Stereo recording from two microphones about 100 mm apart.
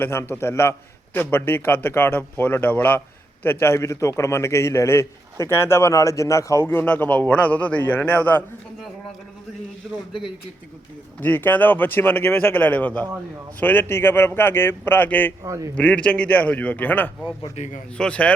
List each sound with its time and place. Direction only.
0.0 s a man's voice: 25° left (ahead or behind)
6.8 s a man's voice: 15° left (ahead or behind)
9.8 s speech: centre (ahead or behind)
11.2 s a man's voice: 20° left (ahead or behind)
15.4 s a man's voice: 30° right (ahead or behind)
15.7 s a man's voice: 15° left (ahead or behind)